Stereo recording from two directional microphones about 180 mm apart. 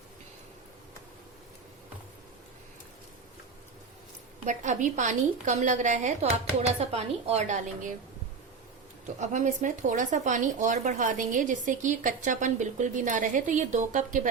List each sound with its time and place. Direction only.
4.4 s speech: 45° right (ahead or behind)
9.2 s speech: 40° right (ahead or behind)